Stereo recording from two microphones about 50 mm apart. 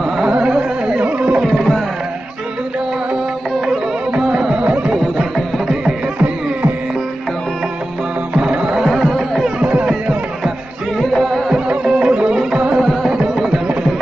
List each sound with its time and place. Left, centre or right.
0.2 s carnatic music: centre
1.0 s music: right
4.1 s music: centre
8.3 s music: centre
8.9 s music: centre
11.8 s music: centre